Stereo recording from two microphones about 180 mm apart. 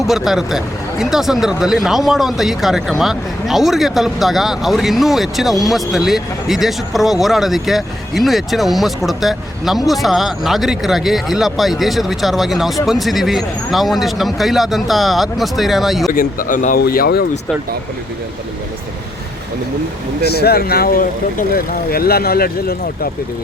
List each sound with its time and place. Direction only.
0.0 s speech: centre (ahead or behind)
16.1 s speech: 50° left (ahead or behind)
16.8 s speech: 60° left (ahead or behind)
20.4 s speech: 60° left (ahead or behind)